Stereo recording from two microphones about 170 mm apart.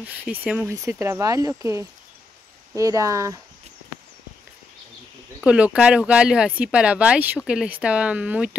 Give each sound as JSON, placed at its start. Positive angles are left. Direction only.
{"t": 0.0, "sound": "speech", "side_deg": -10}
{"t": 5.4, "sound": "speech", "side_deg": -5}